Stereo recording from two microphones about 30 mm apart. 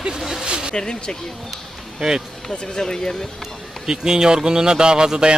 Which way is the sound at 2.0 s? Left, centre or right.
Right.